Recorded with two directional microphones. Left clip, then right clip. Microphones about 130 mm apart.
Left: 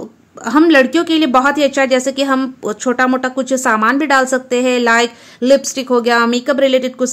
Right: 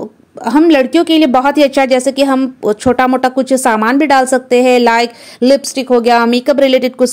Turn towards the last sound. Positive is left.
turn(degrees=-45)  # may be behind; listen again after turning